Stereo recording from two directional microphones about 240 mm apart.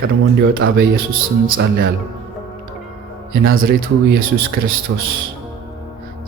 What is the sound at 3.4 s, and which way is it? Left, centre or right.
Speech, right.